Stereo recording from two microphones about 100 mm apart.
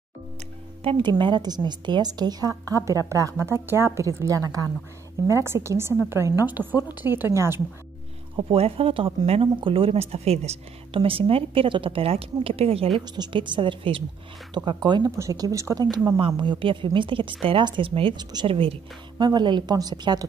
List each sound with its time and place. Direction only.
0.8 s a woman's voice: 55° right (ahead or behind); by 7.6 s 25° right (ahead or behind)
8.4 s speech: 75° right (ahead or behind)
9.6 s speech: 60° right (ahead or behind)
13.1 s speech: 50° right (ahead or behind)
14.5 s a woman's voice: 45° right (ahead or behind)
15.0 s a woman's voice: 30° right (ahead or behind)
16.2 s speech: 60° right (ahead or behind)
18.1 s a woman's voice: 45° right (ahead or behind)
18.5 s speech: 65° right (ahead or behind)
19.1 s a woman's voice: 45° right (ahead or behind)